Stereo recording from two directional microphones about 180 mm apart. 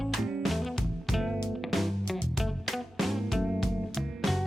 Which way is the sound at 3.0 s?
Centre (ahead or behind).